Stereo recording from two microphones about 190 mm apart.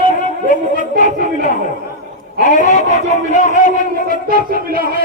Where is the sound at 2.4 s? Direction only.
40° left (ahead or behind).